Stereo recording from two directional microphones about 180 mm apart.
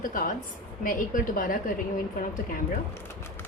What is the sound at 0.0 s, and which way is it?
A woman's voice, 50° left (ahead or behind).